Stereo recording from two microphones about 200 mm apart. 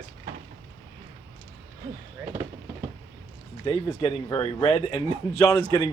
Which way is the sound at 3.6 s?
25° left (ahead or behind).